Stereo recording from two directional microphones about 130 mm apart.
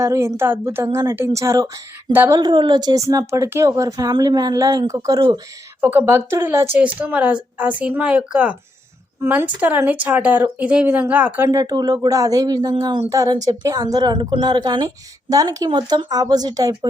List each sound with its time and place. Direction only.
0.0 s speech: 20° right (ahead or behind)
5.8 s speech: 15° right (ahead or behind)
11.4 s speech: 25° right (ahead or behind)